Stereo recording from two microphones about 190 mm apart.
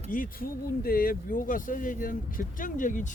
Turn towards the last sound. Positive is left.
turn(degrees=40)  # may be behind; listen again after turning